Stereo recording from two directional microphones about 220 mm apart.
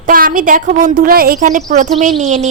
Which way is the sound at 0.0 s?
40° right (ahead or behind).